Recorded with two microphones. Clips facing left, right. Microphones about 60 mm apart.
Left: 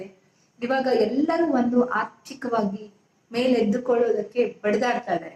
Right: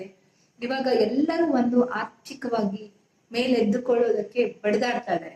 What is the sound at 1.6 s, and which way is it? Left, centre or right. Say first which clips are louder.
A man's voice: left 1 dB; left.